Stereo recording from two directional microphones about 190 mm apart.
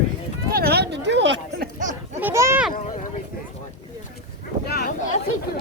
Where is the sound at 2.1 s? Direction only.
10° right (ahead or behind).